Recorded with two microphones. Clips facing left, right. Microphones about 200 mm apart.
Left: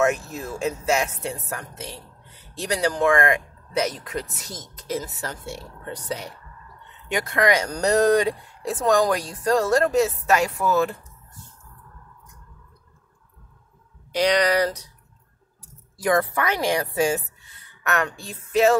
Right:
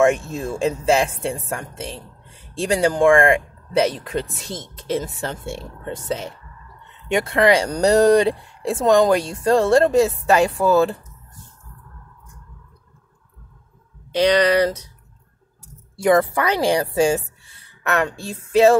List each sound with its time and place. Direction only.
0.0 s speech: 30° right (ahead or behind)
14.1 s speech: 25° right (ahead or behind)
16.0 s a woman's voice: 30° right (ahead or behind)